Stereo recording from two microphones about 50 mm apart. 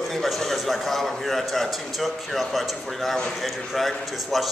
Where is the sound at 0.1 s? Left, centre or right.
Centre.